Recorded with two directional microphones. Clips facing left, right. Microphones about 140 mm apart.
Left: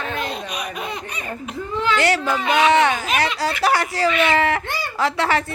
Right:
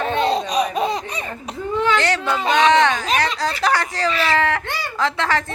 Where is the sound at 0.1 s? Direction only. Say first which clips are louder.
Right 8 dB; 30° right (ahead or behind).